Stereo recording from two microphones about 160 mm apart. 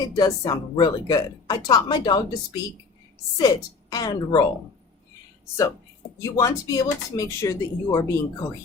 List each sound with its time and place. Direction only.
0.2 s a woman's voice: 25° left (ahead or behind)
6.3 s a woman's voice: 20° left (ahead or behind)